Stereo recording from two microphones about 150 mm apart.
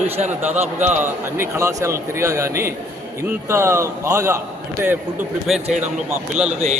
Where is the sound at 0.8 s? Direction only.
10° right (ahead or behind).